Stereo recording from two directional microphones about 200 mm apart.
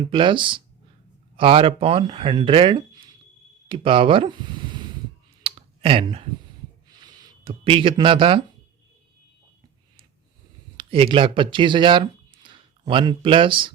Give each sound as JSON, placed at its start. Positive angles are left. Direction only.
{"t": 0.0, "sound": "speech", "side_deg": -25}
{"t": 5.4, "sound": "clicking", "side_deg": -25}
{"t": 6.8, "sound": "a sound", "side_deg": -20}
{"t": 10.8, "sound": "speech", "side_deg": -25}